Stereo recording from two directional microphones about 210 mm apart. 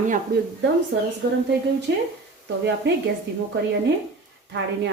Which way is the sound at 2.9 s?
55° right (ahead or behind).